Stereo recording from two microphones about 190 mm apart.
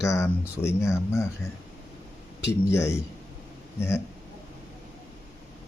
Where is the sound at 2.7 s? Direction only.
15° left (ahead or behind).